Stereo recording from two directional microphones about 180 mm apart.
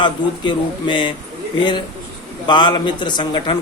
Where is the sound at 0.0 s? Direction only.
25° left (ahead or behind).